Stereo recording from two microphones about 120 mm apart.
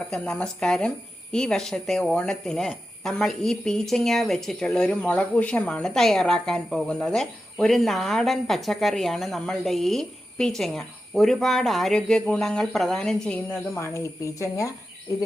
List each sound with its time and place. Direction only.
0.1 s a woman's voice: 5° left (ahead or behind)
13.5 s speech: 20° left (ahead or behind)